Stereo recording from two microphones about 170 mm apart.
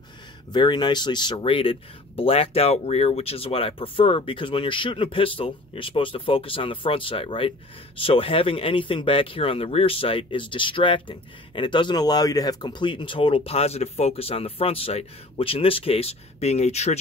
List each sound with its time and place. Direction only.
0.5 s speech: 25° left (ahead or behind)